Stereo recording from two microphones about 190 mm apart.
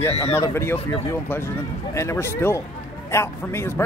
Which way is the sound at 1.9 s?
15° left (ahead or behind).